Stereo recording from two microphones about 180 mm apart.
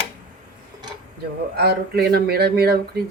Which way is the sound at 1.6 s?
65° right (ahead or behind).